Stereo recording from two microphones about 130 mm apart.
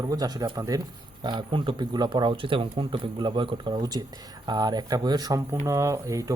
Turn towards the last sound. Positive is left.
turn(degrees=-25)  # may be behind; listen again after turning